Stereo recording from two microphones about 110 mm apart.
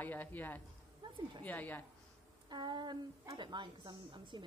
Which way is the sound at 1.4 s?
15° left (ahead or behind).